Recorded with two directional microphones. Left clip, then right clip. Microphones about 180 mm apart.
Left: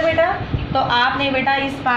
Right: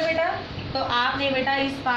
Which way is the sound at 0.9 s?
35° left (ahead or behind).